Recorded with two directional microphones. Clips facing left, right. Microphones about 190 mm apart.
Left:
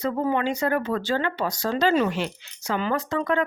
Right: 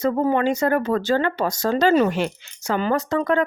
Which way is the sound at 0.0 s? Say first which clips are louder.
Right 4 dB; 45° right (ahead or behind).